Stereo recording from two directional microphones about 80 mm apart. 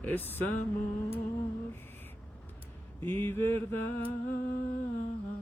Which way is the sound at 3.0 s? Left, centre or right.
Left.